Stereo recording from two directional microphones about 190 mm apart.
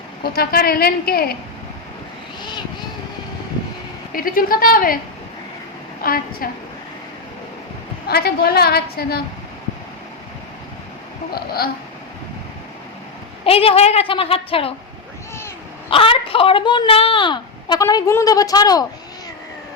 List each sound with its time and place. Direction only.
0.2 s a woman's voice: 55° left (ahead or behind)
4.1 s a woman's voice: 50° left (ahead or behind)
6.0 s a woman's voice: 50° left (ahead or behind)
8.0 s a woman's voice: 55° left (ahead or behind)
11.3 s a woman's voice: 55° left (ahead or behind)
13.4 s a woman's voice: 30° left (ahead or behind)
15.9 s a woman's voice: 30° left (ahead or behind)